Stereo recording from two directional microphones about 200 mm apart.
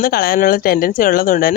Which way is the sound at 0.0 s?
50° left (ahead or behind).